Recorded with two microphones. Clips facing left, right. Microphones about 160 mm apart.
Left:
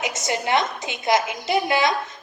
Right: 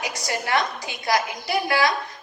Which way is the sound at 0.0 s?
20° left (ahead or behind).